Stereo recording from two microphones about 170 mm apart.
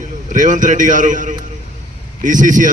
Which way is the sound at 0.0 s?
50° right (ahead or behind).